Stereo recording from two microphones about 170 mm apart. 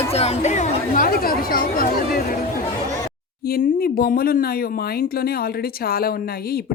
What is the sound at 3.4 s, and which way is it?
Speech, 65° left (ahead or behind).